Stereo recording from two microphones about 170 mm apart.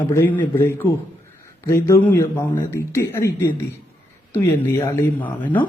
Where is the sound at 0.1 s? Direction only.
15° left (ahead or behind).